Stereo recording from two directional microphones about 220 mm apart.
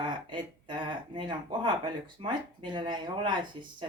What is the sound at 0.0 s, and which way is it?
Speech, 20° right (ahead or behind).